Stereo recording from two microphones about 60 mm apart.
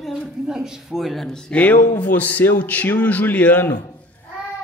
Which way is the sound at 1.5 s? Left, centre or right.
Left.